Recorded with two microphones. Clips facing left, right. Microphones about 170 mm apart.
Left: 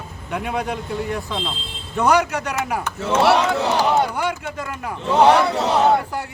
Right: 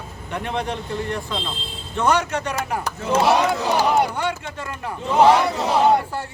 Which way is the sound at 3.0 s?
75° left (ahead or behind).